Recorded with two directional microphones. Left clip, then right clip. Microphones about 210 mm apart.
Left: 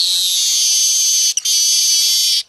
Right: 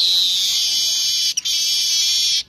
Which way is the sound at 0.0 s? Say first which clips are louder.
Left 1 dB; 15° left (ahead or behind).